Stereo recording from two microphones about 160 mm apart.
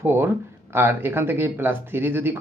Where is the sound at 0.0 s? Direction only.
15° right (ahead or behind).